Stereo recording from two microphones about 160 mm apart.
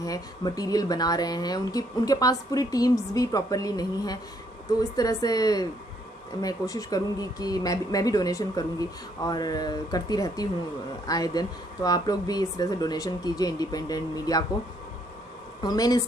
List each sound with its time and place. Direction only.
0.0 s speech: 25° left (ahead or behind)
15.6 s speech: 25° left (ahead or behind)